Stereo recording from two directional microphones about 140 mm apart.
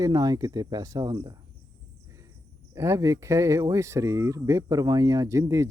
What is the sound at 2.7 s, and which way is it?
Speech, 20° right (ahead or behind).